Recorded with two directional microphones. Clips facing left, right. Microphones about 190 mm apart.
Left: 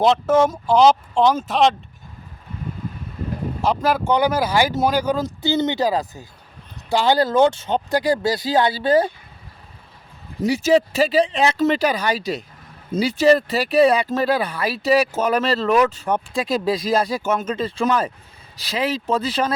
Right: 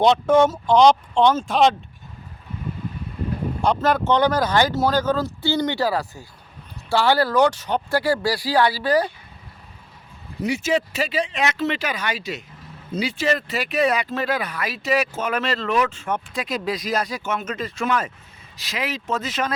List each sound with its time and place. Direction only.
0.0 s speech: centre (ahead or behind)
3.8 s speech: 10° left (ahead or behind); by 9.0 s 25° left (ahead or behind)
10.4 s speech: 35° left (ahead or behind)